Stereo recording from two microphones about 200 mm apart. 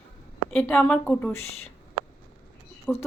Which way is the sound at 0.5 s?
5° left (ahead or behind).